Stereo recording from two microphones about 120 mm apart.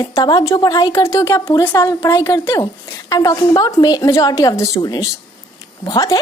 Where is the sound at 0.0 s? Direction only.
35° left (ahead or behind).